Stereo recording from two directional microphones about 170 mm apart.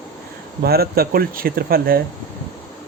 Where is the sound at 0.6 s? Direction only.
65° right (ahead or behind).